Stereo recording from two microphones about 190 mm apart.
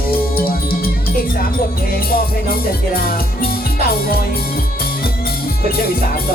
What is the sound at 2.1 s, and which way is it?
Music, 50° left (ahead or behind).